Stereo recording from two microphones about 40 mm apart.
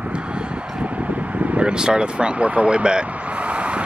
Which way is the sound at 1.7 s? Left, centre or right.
Right.